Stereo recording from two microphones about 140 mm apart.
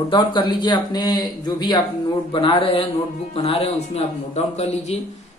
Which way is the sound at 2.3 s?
40° left (ahead or behind).